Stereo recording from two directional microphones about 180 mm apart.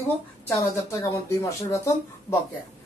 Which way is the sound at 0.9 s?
15° left (ahead or behind).